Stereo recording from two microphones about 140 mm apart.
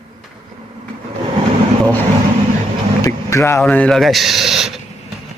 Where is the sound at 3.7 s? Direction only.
10° left (ahead or behind).